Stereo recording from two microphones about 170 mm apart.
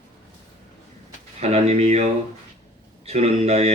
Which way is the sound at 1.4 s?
40° right (ahead or behind).